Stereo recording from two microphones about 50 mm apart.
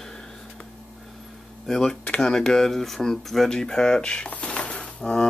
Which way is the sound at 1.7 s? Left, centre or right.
Centre.